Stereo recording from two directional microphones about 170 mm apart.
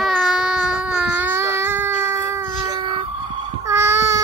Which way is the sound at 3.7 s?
15° right (ahead or behind).